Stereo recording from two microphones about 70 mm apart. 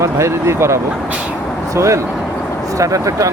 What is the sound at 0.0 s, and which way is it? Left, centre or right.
Speech, right.